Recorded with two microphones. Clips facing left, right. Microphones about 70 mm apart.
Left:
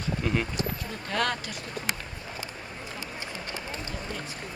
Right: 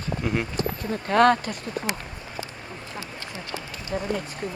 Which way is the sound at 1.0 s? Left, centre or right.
Right.